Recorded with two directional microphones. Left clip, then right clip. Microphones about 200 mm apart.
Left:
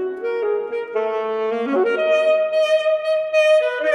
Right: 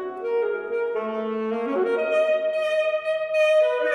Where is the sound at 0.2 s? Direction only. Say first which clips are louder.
Left 1 dB; 30° left (ahead or behind).